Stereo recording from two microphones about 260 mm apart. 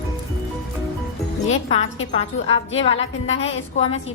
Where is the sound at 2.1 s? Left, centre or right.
Left.